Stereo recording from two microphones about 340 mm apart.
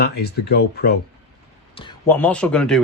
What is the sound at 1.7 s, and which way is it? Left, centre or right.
A man's voice, centre.